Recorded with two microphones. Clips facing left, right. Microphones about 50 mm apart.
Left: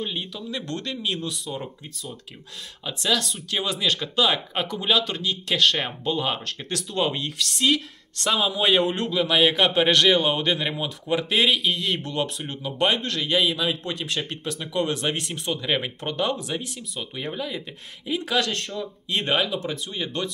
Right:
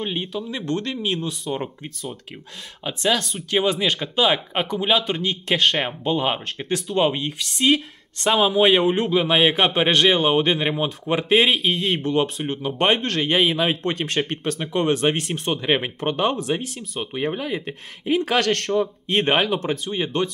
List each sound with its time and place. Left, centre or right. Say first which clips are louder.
0.0 s a man's voice: right 4 dB; right
8.8 s speech: right 5 dB; centre
9.1 s a man's voice: left 1 dB; right
18.5 s speech: right 9 dB; right